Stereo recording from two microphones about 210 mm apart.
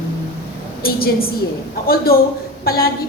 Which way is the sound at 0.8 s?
45° left (ahead or behind).